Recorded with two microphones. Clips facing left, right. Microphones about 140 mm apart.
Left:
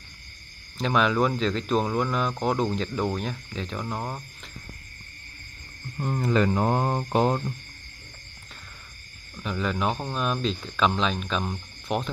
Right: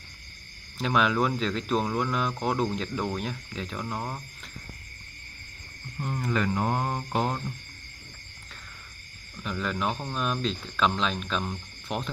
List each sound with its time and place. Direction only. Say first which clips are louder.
0.7 s speech: left 2 dB; 5° right (ahead or behind)
6.0 s mantra: left 5 dB; 35° left (ahead or behind)
9.4 s speech: left 3 dB; centre (ahead or behind)